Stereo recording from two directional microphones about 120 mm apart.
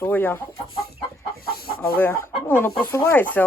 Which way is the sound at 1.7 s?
15° left (ahead or behind).